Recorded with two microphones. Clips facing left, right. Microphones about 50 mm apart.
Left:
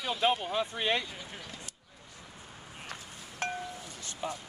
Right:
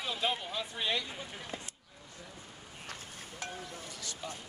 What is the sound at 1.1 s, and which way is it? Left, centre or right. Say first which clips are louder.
Speech: even; right.